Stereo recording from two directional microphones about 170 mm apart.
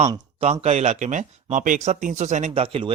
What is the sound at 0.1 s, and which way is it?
Speech, 35° right (ahead or behind).